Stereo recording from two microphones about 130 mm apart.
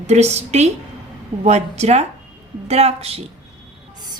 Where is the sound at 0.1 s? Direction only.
60° right (ahead or behind).